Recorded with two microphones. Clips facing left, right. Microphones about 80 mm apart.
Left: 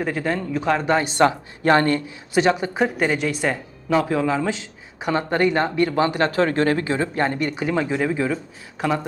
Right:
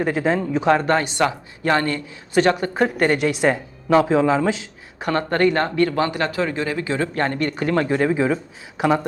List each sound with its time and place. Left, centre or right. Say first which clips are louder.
0.0 s a woman's voice: right 4 dB; centre
0.8 s speech: right 1 dB; centre
1.0 s speech: left 3 dB; left
2.3 s speech: right 1 dB; centre
2.8 s a woman's voice: right 3 dB; centre
4.9 s speech: right 1 dB; centre; by 6.8 s left
6.8 s speech: even; left; by 8.2 s centre